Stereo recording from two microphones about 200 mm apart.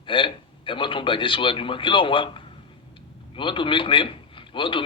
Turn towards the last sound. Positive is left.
turn(degrees=25)  # may be behind; listen again after turning